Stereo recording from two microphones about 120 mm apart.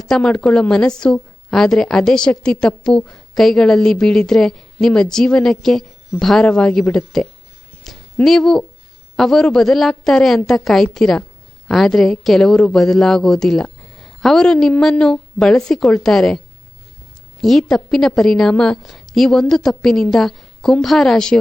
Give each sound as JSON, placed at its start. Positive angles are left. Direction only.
{"t": 0.0, "sound": "a woman's voice", "side_deg": 5}
{"t": 7.9, "sound": "a sound", "side_deg": 5}
{"t": 9.1, "sound": "a woman's voice", "side_deg": 5}
{"t": 17.4, "sound": "a woman's voice", "side_deg": 0}